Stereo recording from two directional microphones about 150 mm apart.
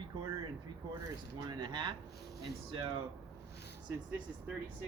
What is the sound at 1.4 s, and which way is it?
Speech, 30° right (ahead or behind).